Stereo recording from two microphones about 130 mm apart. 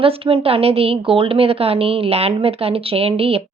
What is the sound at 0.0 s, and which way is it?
A woman's voice, 45° right (ahead or behind).